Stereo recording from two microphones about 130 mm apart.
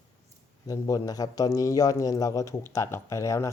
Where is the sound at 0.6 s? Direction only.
25° left (ahead or behind).